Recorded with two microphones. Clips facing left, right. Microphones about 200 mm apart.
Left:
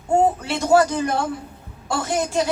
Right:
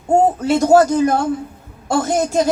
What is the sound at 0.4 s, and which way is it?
A woman's voice, 40° right (ahead or behind).